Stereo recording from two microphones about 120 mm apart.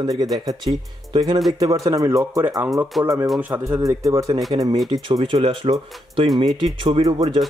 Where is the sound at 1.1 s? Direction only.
35° right (ahead or behind).